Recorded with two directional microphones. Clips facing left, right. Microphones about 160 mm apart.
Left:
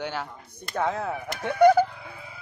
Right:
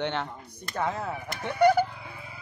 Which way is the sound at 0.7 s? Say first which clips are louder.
Left 3 dB; 60° left (ahead or behind).